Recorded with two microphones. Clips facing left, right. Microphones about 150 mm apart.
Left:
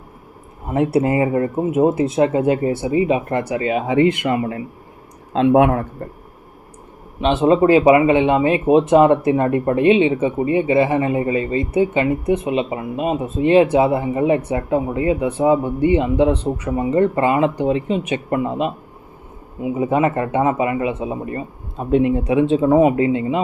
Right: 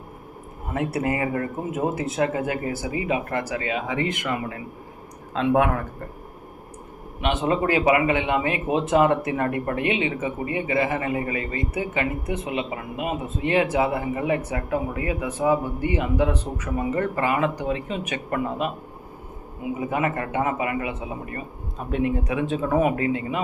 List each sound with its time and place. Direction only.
0.7 s speech: 25° left (ahead or behind)
7.2 s speech: 25° left (ahead or behind)
19.7 s speech: 25° left (ahead or behind)